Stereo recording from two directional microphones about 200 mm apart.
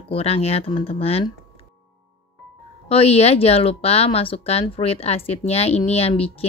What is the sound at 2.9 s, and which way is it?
Speech, 30° left (ahead or behind).